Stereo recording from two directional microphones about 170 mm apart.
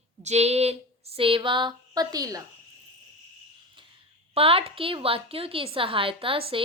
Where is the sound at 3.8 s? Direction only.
30° right (ahead or behind).